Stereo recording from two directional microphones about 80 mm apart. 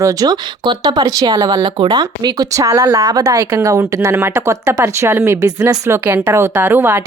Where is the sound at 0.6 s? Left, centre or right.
Right.